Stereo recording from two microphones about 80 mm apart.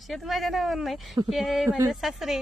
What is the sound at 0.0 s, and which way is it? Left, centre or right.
A woman's voice, centre.